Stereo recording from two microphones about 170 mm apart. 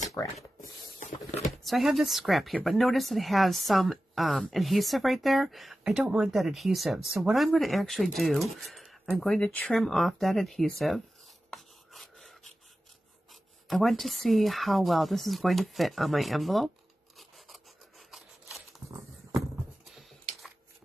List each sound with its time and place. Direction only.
0.1 s speech: 20° left (ahead or behind)
1.6 s speech: centre (ahead or behind)
17.2 s filing: centre (ahead or behind)
19.8 s a sound: centre (ahead or behind)